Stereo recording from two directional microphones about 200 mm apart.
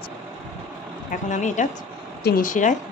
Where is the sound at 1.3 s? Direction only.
40° left (ahead or behind).